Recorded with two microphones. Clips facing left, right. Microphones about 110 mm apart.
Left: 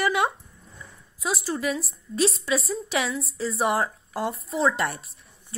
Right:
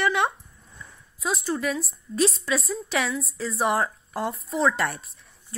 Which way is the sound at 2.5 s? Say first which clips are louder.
Left 1 dB; 30° left (ahead or behind).